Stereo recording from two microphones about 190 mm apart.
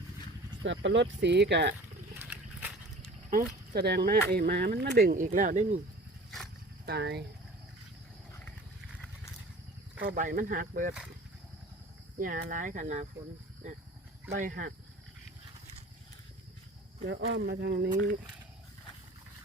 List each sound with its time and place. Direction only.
0.6 s speech: 75° right (ahead or behind)
2.1 s a sound: 10° right (ahead or behind)
3.0 s a sound: 45° right (ahead or behind)
3.7 s speech: 55° right (ahead or behind)
6.8 s speech: 60° right (ahead or behind)
10.0 s speech: 45° right (ahead or behind)
12.2 s speech: 45° right (ahead or behind)
14.3 s speech: 45° right (ahead or behind)
17.2 s speech: 55° right (ahead or behind)
17.9 s speech: 45° right (ahead or behind)